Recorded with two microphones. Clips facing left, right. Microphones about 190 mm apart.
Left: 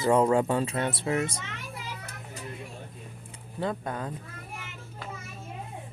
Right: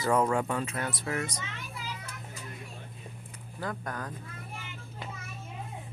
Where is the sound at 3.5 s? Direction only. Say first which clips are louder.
Left 5 dB; 25° left (ahead or behind).